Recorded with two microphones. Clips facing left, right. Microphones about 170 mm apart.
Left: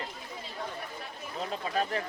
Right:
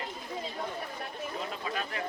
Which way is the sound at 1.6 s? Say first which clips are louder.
Left 5 dB; 35° left (ahead or behind).